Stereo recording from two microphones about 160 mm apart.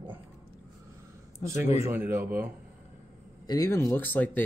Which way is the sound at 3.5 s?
20° left (ahead or behind).